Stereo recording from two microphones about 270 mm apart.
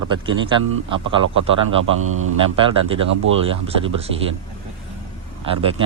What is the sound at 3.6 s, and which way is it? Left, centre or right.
Speech, right.